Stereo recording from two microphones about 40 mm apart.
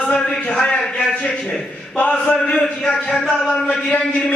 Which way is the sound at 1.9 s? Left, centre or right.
Left.